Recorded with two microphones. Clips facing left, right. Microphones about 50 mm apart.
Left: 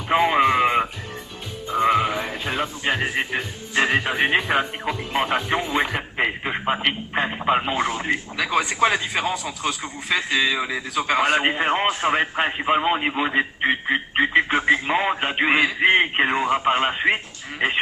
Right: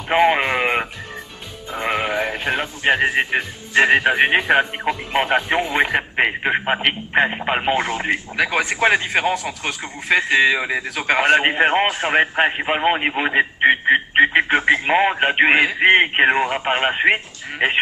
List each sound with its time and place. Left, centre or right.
0.1 s a sound: right
2.8 s speech: right
5.7 s radio: right
6.8 s speech: right